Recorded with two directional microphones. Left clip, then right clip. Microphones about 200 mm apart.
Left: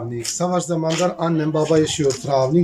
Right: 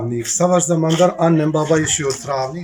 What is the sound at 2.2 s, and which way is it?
Speech, 30° left (ahead or behind).